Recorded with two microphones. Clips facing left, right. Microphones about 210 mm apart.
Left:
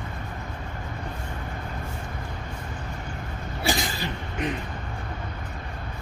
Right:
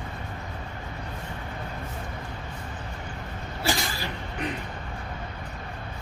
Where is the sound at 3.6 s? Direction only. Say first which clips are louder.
Left 2 dB; 20° left (ahead or behind).